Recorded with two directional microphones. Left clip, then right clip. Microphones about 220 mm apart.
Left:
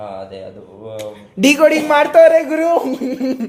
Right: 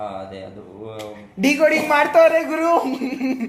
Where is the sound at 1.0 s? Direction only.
55° left (ahead or behind).